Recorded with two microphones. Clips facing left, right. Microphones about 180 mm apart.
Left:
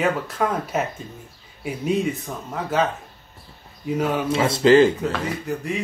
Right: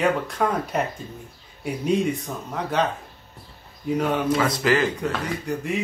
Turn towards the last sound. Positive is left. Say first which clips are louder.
# even
turn(degrees=0)  # may be behind; listen again after turning